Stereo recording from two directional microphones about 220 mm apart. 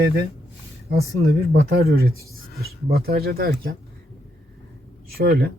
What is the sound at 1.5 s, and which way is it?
Speech, 45° right (ahead or behind).